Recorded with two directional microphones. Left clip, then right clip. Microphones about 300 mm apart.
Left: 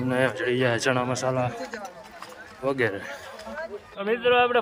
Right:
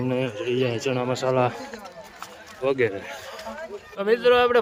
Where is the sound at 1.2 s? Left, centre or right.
Centre.